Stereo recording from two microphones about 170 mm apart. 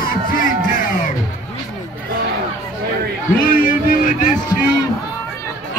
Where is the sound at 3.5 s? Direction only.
50° left (ahead or behind).